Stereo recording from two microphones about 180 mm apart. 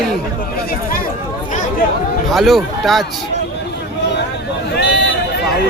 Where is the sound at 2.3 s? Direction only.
Centre (ahead or behind).